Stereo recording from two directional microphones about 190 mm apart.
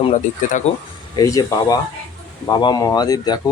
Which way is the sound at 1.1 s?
20° left (ahead or behind).